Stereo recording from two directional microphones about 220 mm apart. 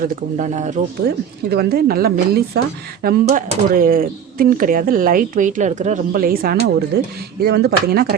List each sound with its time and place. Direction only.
0.0 s speech: 35° right (ahead or behind)
1.5 s speech: 45° right (ahead or behind)